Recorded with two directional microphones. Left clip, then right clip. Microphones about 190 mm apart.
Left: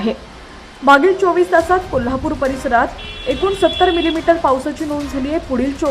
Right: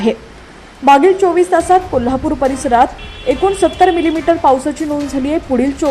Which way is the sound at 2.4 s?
15° right (ahead or behind).